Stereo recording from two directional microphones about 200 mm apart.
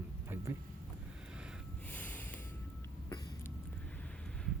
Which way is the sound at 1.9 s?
10° left (ahead or behind).